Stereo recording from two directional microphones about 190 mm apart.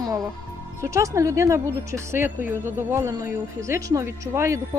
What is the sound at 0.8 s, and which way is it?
Speech, 15° right (ahead or behind).